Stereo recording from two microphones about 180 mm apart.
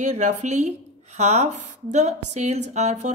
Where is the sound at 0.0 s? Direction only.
40° right (ahead or behind).